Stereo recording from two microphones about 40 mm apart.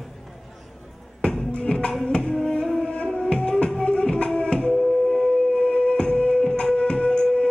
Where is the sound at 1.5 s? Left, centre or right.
Left.